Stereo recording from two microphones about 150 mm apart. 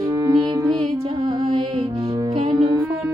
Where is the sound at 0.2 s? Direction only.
25° right (ahead or behind).